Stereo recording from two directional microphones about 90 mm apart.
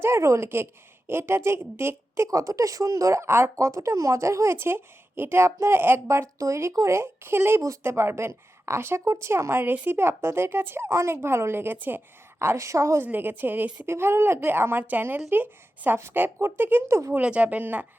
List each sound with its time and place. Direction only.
0.0 s a woman's voice: 30° right (ahead or behind)
13.1 s a woman's voice: 20° right (ahead or behind)
17.2 s speech: 15° right (ahead or behind)